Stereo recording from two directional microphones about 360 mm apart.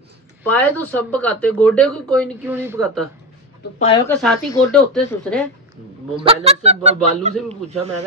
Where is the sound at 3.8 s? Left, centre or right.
Centre.